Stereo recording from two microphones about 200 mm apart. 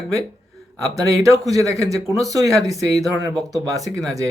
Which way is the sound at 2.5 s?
Centre (ahead or behind).